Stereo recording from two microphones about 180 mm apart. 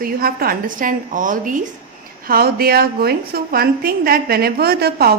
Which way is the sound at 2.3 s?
55° right (ahead or behind).